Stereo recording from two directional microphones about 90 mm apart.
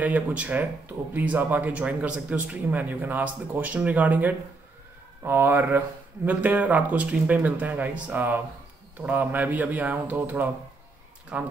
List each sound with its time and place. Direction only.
0.0 s speech: 15° right (ahead or behind)